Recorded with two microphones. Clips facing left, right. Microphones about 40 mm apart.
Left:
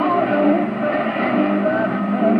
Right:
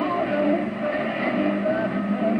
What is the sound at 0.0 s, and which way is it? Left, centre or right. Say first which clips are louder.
Vehicle: left 6 dB; left.